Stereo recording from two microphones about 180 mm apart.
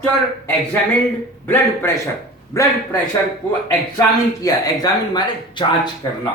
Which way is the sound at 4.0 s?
20° left (ahead or behind).